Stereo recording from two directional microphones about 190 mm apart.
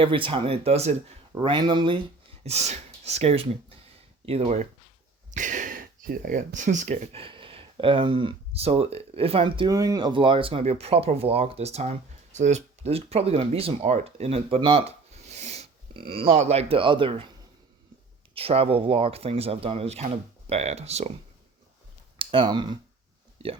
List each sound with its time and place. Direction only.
0.0 s speech: 25° right (ahead or behind)
2.4 s speech: 35° right (ahead or behind)
18.3 s speech: 30° right (ahead or behind)
22.2 s speech: 25° right (ahead or behind)